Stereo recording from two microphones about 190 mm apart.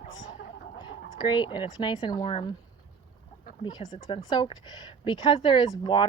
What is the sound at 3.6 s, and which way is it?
Speech, 20° left (ahead or behind).